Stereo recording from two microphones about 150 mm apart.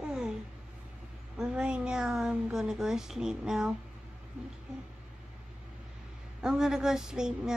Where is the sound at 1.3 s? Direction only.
5° right (ahead or behind).